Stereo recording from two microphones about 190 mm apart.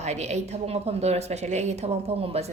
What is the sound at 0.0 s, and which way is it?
A woman's voice, 35° right (ahead or behind).